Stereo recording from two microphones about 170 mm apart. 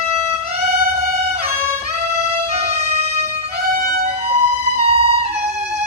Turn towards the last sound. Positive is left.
turn(degrees=-35)  # may be behind; listen again after turning